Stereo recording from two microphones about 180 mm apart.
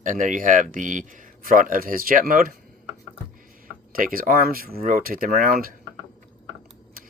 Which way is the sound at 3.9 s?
50° right (ahead or behind).